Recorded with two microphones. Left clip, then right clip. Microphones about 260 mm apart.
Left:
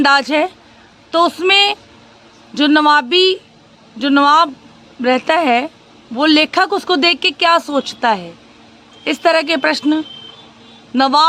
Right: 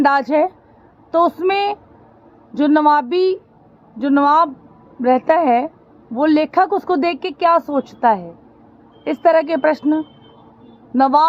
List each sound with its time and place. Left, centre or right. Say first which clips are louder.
0.3 s speech: even; centre